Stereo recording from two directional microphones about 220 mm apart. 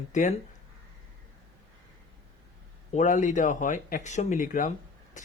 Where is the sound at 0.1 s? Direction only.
35° left (ahead or behind).